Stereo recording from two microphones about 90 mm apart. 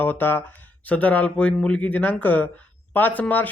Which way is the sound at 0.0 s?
20° left (ahead or behind).